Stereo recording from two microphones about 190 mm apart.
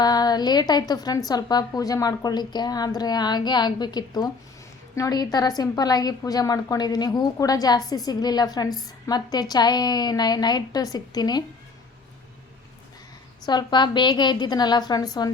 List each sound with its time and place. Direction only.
0.0 s a woman's voice: 20° left (ahead or behind)
13.4 s a woman's voice: 20° left (ahead or behind)